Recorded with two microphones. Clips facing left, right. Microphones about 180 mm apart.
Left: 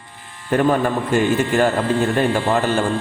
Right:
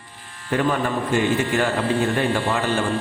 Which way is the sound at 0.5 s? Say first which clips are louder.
Left 4 dB; 45° left (ahead or behind).